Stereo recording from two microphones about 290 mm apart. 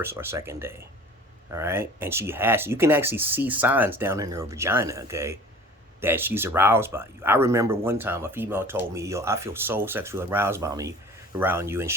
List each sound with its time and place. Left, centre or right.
0.0 s speech: centre